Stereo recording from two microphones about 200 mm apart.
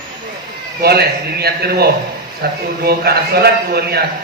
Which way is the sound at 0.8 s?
50° right (ahead or behind).